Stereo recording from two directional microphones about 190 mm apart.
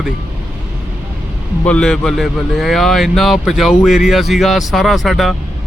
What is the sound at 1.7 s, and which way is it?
Speech, 5° left (ahead or behind).